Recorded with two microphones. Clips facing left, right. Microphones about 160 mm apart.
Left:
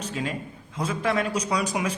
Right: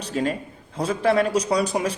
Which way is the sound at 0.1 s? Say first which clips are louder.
Right 6 dB; 40° right (ahead or behind).